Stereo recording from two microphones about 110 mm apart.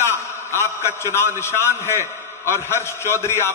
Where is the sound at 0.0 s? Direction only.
20° left (ahead or behind).